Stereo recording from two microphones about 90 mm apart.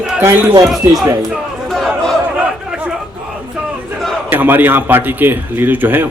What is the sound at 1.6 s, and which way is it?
Chatter, 5° left (ahead or behind).